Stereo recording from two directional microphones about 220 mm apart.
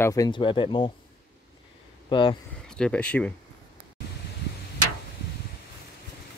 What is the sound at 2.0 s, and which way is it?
Speech, 20° left (ahead or behind).